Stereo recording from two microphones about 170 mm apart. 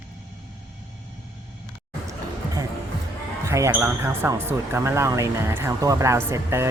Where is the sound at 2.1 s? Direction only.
20° right (ahead or behind).